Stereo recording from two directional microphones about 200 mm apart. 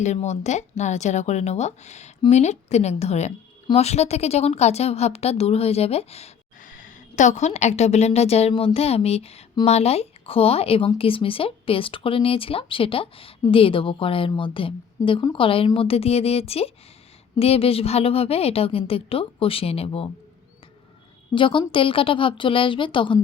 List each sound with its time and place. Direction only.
0.0 s a woman's voice: 35° left (ahead or behind)
21.3 s a woman's voice: 25° left (ahead or behind)